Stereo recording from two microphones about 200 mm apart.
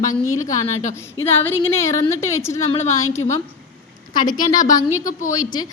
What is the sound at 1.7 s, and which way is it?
Speech, 15° left (ahead or behind).